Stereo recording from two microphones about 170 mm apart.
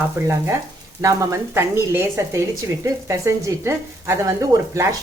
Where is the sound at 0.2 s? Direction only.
15° right (ahead or behind).